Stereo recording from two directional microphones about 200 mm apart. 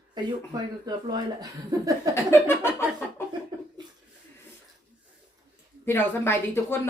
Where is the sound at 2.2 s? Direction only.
10° left (ahead or behind).